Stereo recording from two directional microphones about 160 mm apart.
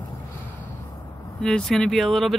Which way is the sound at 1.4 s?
5° left (ahead or behind).